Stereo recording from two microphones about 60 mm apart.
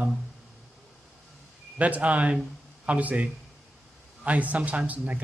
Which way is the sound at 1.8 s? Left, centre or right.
Right.